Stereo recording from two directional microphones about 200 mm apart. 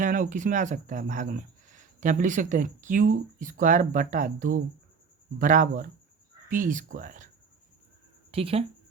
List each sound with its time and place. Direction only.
0.0 s speech: 40° right (ahead or behind)
8.3 s speech: 30° right (ahead or behind)